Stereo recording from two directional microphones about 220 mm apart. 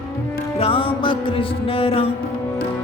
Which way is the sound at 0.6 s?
25° left (ahead or behind).